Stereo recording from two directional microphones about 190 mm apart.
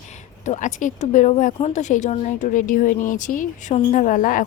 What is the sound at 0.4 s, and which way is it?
A woman's voice, 40° left (ahead or behind).